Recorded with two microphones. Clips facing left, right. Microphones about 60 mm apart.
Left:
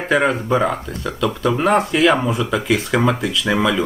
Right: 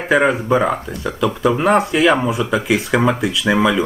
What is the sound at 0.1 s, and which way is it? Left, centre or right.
Speech, centre.